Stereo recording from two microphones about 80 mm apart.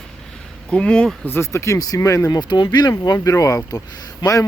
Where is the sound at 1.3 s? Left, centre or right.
Left.